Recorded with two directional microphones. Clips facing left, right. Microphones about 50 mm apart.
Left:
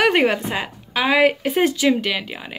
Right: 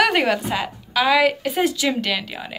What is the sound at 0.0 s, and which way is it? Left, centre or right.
A woman's voice, left.